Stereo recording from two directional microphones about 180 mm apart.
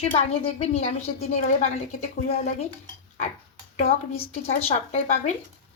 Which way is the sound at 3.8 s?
35° left (ahead or behind).